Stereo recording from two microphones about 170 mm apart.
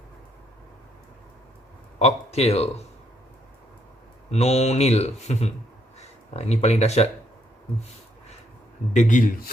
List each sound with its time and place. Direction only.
2.0 s speech: 40° left (ahead or behind)
4.3 s speech: 40° left (ahead or behind)
8.9 s a man's voice: 45° left (ahead or behind)